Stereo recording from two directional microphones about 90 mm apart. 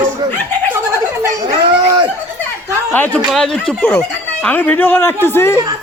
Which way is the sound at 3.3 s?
5° left (ahead or behind).